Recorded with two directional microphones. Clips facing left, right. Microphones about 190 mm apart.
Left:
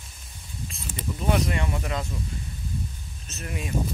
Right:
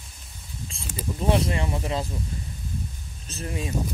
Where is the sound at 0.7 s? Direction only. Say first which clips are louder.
Right 2 dB; 30° right (ahead or behind).